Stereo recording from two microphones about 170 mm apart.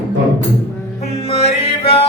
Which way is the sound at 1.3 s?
35° left (ahead or behind).